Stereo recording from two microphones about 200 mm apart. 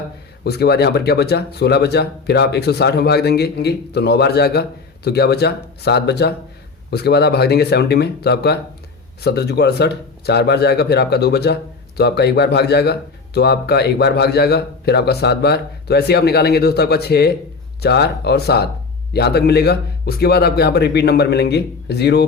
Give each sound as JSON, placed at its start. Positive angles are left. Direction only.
{"t": 0.4, "sound": "speech", "side_deg": 55}